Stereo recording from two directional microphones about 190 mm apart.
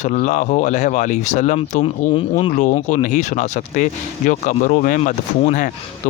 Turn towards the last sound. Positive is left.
turn(degrees=45)  # may be behind; listen again after turning